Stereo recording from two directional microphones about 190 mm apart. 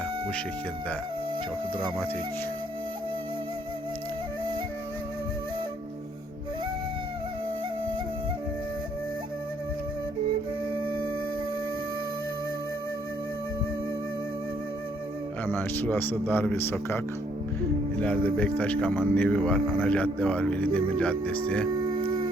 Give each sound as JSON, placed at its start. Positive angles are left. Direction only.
{"t": 15.4, "sound": "speech", "side_deg": 10}
{"t": 18.0, "sound": "speech", "side_deg": 5}
{"t": 21.8, "sound": "music", "side_deg": -25}